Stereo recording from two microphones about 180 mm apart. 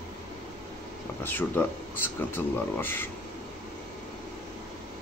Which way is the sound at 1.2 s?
10° left (ahead or behind).